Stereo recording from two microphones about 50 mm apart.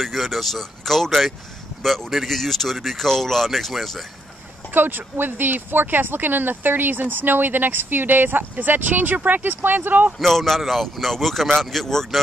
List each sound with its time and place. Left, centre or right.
0.0 s speech: centre
4.6 s speech: right
10.1 s speech: centre